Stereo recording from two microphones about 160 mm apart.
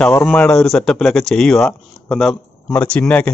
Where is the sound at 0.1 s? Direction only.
10° left (ahead or behind).